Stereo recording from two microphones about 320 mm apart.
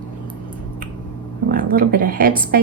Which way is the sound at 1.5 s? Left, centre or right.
Right.